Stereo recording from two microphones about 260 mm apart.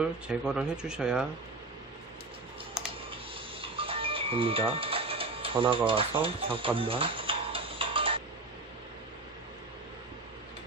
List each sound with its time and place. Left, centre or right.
0.0 s speech: centre
3.6 s music: right